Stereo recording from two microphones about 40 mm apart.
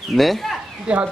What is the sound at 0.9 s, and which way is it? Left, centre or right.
Speech, right.